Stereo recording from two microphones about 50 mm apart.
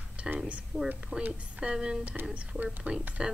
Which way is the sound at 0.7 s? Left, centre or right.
Right.